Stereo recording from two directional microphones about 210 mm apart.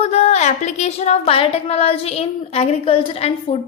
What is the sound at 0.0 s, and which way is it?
A woman's voice, 30° left (ahead or behind).